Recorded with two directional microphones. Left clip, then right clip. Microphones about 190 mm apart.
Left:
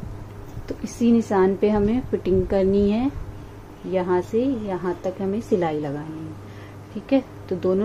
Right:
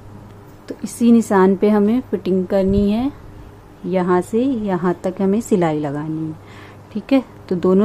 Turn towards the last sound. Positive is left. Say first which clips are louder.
# right 6 dB
turn(degrees=-35)  # may be behind; listen again after turning